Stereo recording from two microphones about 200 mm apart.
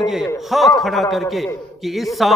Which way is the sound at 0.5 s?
Centre (ahead or behind).